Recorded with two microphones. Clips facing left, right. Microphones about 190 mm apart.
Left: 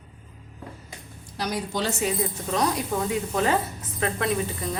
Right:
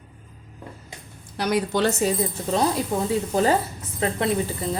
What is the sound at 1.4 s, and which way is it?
Speech, 65° right (ahead or behind).